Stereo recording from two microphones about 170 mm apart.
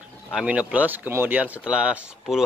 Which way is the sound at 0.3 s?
5° right (ahead or behind).